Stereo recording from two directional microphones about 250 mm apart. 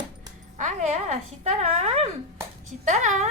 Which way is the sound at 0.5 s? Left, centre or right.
Right.